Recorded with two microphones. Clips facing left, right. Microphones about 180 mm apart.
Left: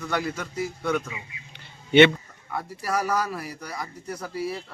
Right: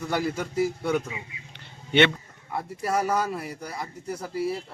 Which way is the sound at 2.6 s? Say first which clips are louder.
Right 1 dB; 25° right (ahead or behind).